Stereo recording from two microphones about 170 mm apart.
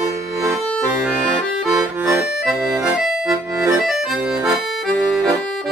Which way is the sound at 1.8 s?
15° right (ahead or behind).